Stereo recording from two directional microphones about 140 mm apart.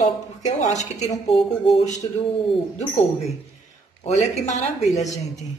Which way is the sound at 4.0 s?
55° left (ahead or behind).